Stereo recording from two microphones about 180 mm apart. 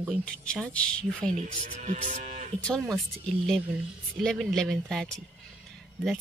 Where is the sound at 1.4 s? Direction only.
45° right (ahead or behind).